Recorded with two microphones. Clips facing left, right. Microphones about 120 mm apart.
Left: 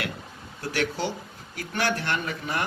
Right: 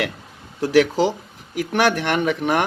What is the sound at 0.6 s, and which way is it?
Speech, 90° right.